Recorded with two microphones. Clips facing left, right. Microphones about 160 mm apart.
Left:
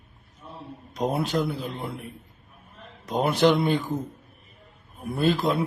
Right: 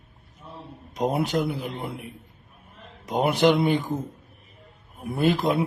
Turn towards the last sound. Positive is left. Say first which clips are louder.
# right 1 dB
turn(degrees=-20)  # may be behind; listen again after turning